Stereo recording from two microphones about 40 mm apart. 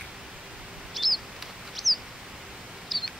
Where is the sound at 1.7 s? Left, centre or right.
Centre.